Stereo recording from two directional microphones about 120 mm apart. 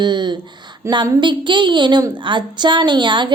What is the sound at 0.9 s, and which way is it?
Speech, 20° right (ahead or behind).